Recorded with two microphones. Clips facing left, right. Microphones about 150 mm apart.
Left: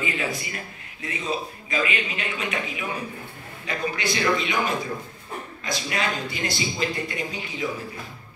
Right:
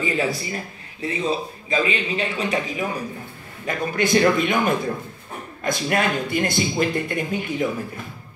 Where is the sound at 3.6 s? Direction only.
50° right (ahead or behind).